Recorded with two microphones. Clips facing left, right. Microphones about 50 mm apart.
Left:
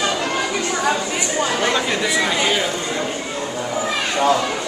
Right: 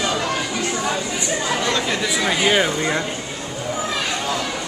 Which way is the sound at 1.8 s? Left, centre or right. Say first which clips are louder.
Left 1 dB; centre.